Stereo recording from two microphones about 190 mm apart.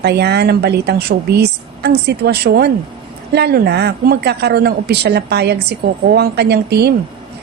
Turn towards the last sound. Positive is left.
turn(degrees=-60)  # may be behind; listen again after turning